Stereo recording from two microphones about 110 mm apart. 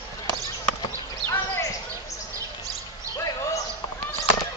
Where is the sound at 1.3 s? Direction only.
30° left (ahead or behind).